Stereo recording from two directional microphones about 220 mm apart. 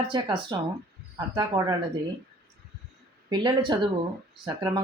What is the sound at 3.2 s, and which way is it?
Speech, 20° right (ahead or behind).